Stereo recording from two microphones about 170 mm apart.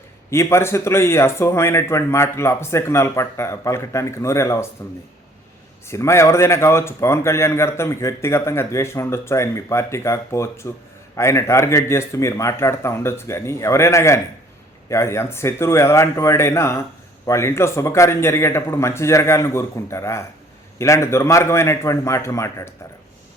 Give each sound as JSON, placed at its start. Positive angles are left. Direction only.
{"t": 0.3, "sound": "a man's voice", "side_deg": 15}
{"t": 5.9, "sound": "a man's voice", "side_deg": 15}